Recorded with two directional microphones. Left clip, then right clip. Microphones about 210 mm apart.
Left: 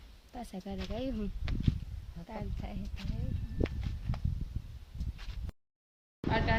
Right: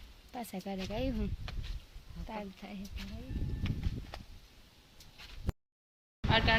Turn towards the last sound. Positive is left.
turn(degrees=5)  # may be behind; listen again after turning